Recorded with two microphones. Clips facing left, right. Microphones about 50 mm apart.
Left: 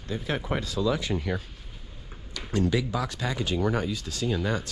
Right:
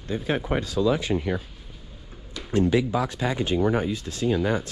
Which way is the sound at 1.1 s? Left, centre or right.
Centre.